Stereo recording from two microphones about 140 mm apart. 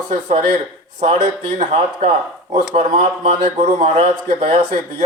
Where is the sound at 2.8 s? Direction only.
45° right (ahead or behind).